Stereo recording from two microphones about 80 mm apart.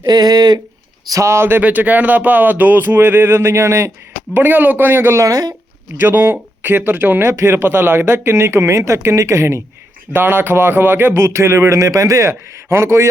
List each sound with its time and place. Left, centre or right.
0.0 s speech: right
1.1 s speech: right
4.4 s speech: right
5.2 s speech: right
6.0 s speech: right
10.1 s speech: right